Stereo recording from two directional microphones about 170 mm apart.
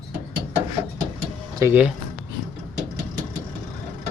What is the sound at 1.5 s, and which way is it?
Speech, 15° right (ahead or behind).